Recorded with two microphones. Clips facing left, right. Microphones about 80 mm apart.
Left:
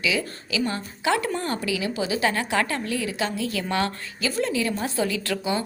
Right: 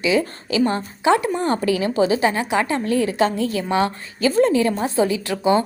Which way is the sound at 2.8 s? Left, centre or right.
Right.